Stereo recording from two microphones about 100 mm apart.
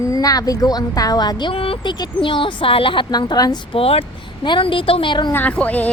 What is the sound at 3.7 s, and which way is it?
Speech, 75° left (ahead or behind).